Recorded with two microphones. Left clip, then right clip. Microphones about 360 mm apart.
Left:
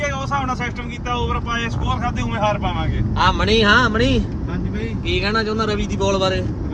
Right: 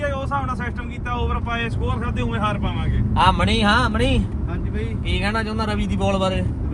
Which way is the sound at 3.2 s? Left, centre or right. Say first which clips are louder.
Left 2 dB; centre.